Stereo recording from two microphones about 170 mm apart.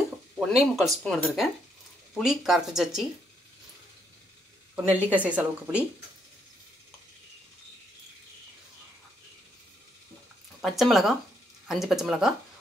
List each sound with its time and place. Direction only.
0.4 s speech: centre (ahead or behind)
4.9 s a woman's voice: 10° right (ahead or behind)
10.6 s speech: centre (ahead or behind)